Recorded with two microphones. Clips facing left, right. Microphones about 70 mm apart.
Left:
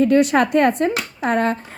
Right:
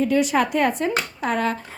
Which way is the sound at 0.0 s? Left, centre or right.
Left.